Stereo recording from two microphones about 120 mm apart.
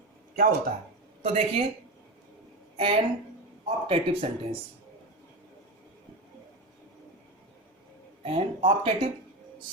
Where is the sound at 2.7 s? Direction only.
50° right (ahead or behind).